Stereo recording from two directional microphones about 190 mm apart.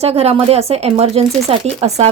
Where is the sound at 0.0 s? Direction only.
35° right (ahead or behind).